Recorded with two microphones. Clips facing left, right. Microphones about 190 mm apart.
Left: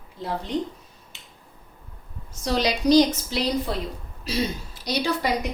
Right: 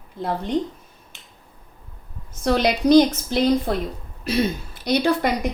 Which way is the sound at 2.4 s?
55° right (ahead or behind).